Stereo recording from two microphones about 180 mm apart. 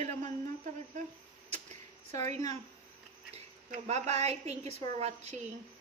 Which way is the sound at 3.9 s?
35° right (ahead or behind).